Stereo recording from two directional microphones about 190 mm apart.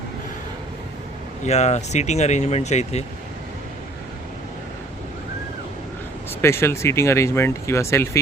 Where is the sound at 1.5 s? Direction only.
35° left (ahead or behind).